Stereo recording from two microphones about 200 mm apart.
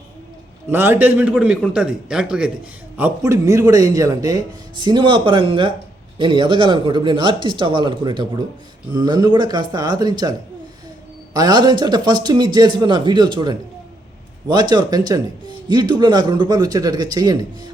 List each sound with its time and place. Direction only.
0.7 s a man's voice: 10° right (ahead or behind)
3.0 s a man's voice: 15° right (ahead or behind)
11.3 s a man's voice: 20° right (ahead or behind)